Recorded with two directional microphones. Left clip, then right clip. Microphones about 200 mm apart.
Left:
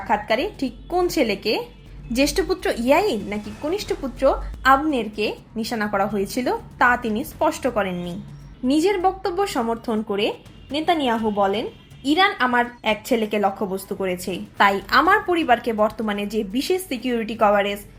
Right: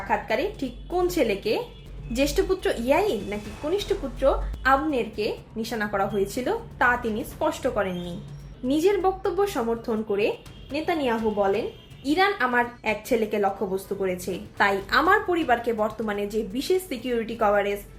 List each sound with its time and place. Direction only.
0.1 s a woman's voice: 30° left (ahead or behind)